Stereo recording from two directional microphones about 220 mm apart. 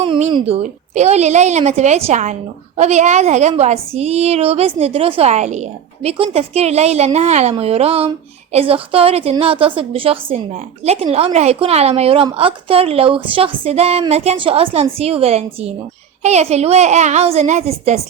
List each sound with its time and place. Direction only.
0.0 s a woman's voice: 25° right (ahead or behind)